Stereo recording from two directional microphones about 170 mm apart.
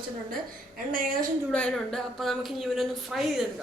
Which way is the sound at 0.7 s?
55° right (ahead or behind).